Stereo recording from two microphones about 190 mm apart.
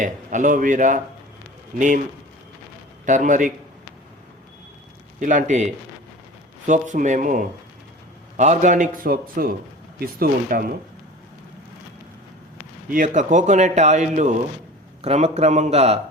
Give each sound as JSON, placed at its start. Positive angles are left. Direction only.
{"t": 0.0, "sound": "a man's voice", "side_deg": -40}
{"t": 3.1, "sound": "speech", "side_deg": -40}
{"t": 5.2, "sound": "a man's voice", "side_deg": -45}
{"t": 12.9, "sound": "speech", "side_deg": -40}